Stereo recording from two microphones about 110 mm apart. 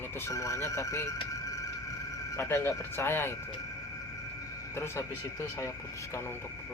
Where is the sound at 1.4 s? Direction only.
30° left (ahead or behind).